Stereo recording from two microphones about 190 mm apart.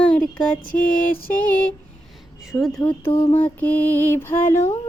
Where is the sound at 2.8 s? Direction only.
15° left (ahead or behind).